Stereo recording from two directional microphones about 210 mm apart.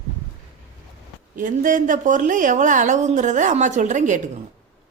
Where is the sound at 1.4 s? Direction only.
40° right (ahead or behind).